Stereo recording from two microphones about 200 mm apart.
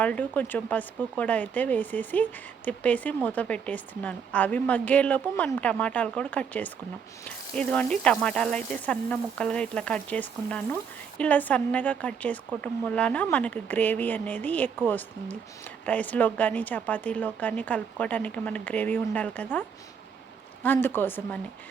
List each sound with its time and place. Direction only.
0.0 s a woman's voice: 10° left (ahead or behind)